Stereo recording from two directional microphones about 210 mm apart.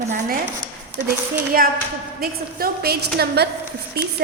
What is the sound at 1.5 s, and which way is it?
A woman's voice, 45° right (ahead or behind).